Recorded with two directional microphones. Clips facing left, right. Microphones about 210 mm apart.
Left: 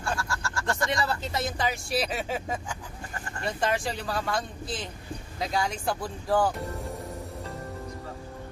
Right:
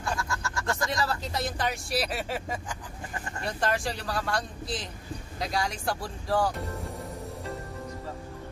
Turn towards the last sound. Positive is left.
turn(degrees=0)  # may be behind; listen again after turning